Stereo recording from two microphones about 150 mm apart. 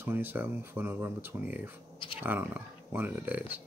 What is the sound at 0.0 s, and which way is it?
Speech, 15° right (ahead or behind).